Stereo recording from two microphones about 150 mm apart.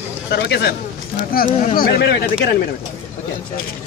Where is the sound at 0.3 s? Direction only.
90° left.